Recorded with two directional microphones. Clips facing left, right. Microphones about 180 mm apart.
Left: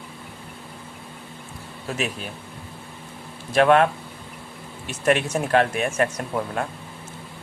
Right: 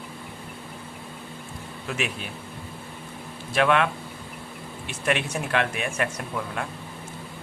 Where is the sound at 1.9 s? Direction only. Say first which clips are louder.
Left 2 dB; 35° left (ahead or behind).